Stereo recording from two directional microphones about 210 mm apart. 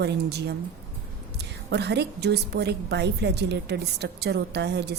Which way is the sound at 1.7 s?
55° right (ahead or behind).